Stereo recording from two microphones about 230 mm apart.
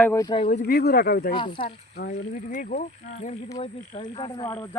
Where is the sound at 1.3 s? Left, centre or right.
Left.